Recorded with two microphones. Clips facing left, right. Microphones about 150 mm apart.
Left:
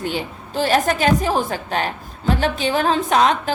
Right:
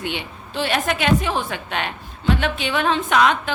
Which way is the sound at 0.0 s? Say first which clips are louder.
Left 4 dB; 40° left (ahead or behind).